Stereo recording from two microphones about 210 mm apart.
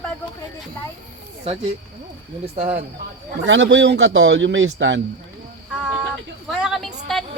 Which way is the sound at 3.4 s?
60° right (ahead or behind).